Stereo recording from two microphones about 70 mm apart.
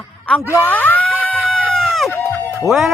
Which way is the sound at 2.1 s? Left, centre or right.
Left.